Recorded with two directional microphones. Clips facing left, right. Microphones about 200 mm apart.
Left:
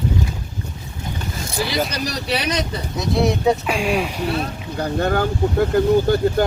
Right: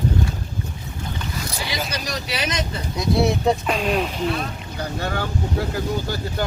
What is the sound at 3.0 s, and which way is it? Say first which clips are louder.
Speech: left 1 dB; centre (ahead or behind).